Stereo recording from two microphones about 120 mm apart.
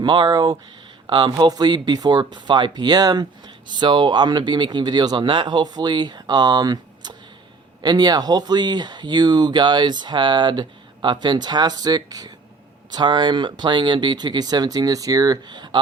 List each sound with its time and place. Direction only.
0.0 s speech: 40° right (ahead or behind)